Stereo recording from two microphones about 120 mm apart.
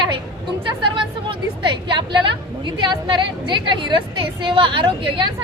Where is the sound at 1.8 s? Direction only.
40° right (ahead or behind).